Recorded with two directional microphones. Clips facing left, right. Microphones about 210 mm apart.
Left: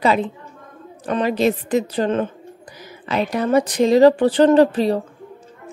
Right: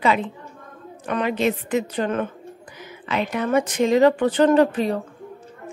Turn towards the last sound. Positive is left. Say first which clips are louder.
# left 3 dB
turn(degrees=35)  # may be behind; listen again after turning